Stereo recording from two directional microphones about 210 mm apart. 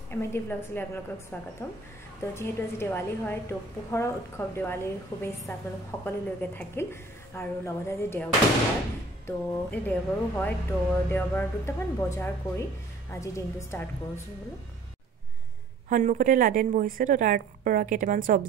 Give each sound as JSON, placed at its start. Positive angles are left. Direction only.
{"t": 0.1, "sound": "a woman's voice", "side_deg": 10}
{"t": 15.9, "sound": "a woman's voice", "side_deg": -35}